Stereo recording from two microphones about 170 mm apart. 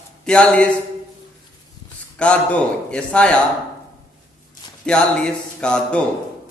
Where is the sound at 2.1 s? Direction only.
5° left (ahead or behind).